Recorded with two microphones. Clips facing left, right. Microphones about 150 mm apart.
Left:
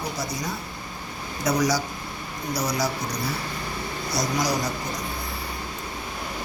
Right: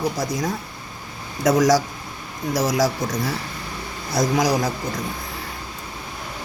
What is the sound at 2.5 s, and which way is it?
Speech, 90° right.